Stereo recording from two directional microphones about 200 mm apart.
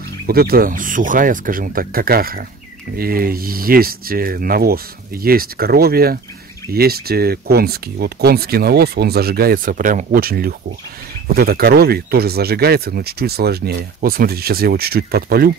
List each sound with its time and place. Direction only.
0.3 s speech: 50° right (ahead or behind)